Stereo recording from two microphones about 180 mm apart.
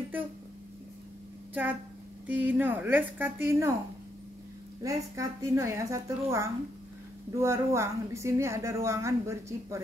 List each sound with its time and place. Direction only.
1.5 s a woman's voice: 10° right (ahead or behind)
4.8 s a woman's voice: 15° right (ahead or behind)